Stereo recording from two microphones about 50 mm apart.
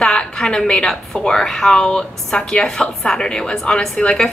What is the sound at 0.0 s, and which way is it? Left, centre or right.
A woman's voice, centre.